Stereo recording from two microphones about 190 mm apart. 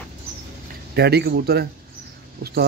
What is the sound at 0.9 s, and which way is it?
Speech, 60° right (ahead or behind).